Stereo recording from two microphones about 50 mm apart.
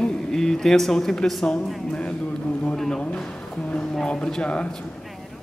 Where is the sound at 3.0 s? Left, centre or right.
Left.